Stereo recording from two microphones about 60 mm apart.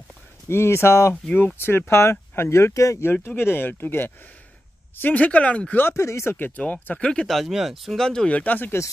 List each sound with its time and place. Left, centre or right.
0.5 s speech: left
3.0 s speech: left
5.8 s speech: left
6.3 s speech: left
7.2 s speech: centre
8.3 s speech: left